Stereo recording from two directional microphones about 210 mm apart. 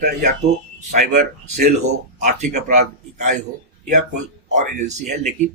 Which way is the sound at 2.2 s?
35° right (ahead or behind).